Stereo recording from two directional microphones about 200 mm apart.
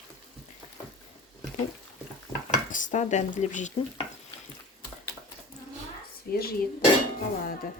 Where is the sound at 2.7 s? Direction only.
40° left (ahead or behind).